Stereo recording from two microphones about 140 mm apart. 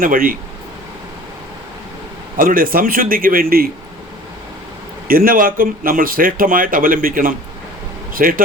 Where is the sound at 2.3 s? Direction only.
90° right.